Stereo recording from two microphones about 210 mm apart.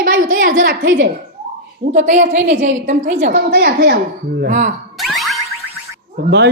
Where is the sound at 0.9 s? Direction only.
45° right (ahead or behind).